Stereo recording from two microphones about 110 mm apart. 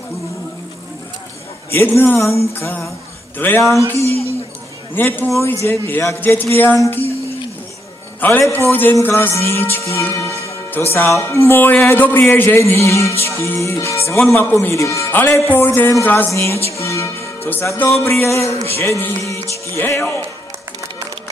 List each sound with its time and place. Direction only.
1.7 s a man's voice: 20° left (ahead or behind)
4.9 s speech: 15° left (ahead or behind)
8.2 s a man's voice: 20° left (ahead or behind)
16.6 s music: 25° left (ahead or behind)
17.5 s speech: 20° left (ahead or behind)